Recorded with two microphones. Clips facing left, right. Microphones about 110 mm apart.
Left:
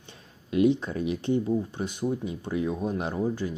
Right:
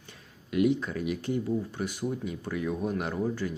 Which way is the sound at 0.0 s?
25° left (ahead or behind).